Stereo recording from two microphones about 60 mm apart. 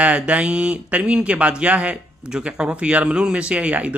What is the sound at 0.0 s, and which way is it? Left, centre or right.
Speech, right.